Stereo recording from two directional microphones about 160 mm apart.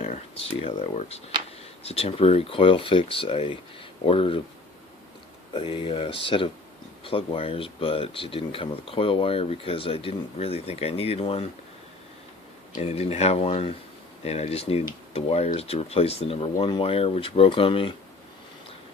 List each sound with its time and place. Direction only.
0.0 s speech: 40° left (ahead or behind)
5.5 s speech: 35° left (ahead or behind)
12.7 s speech: 40° left (ahead or behind)